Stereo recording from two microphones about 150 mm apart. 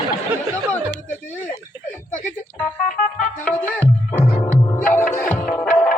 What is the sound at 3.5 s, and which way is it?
Music, 15° left (ahead or behind).